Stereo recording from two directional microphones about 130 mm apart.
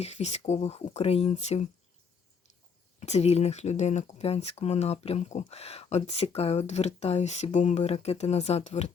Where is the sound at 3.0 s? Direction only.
55° left (ahead or behind).